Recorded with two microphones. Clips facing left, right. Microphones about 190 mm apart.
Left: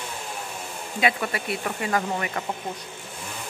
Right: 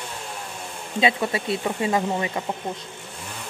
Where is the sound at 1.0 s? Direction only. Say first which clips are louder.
Right 3 dB; 25° right (ahead or behind).